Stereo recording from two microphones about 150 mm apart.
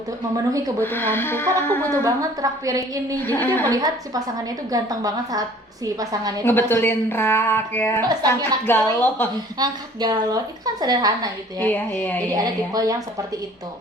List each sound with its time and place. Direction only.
0.8 s speech: 15° left (ahead or behind)
2.4 s a woman's voice: 25° right (ahead or behind)
3.2 s speech: 15° left (ahead or behind)
3.7 s a woman's voice: 25° right (ahead or behind)
6.4 s speech: 15° left (ahead or behind)
8.0 s a woman's voice: 25° right (ahead or behind)
8.6 s speech: 15° left (ahead or behind)
9.6 s a woman's voice: 25° right (ahead or behind)
11.6 s speech: 10° left (ahead or behind)
12.3 s a woman's voice: 20° right (ahead or behind)